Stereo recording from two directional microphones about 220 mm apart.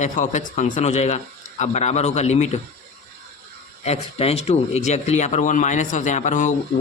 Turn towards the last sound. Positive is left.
turn(degrees=35)  # may be behind; listen again after turning